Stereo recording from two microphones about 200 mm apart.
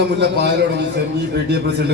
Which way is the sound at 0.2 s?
60° right (ahead or behind).